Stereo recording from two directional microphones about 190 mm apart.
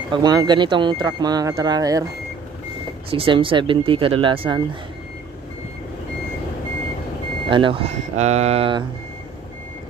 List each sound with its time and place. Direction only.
0.1 s speech: 20° right (ahead or behind)
3.1 s speech: 30° right (ahead or behind)
7.4 s speech: 25° right (ahead or behind)